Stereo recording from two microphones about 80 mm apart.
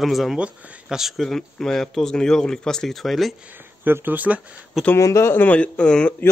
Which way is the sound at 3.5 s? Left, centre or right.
Right.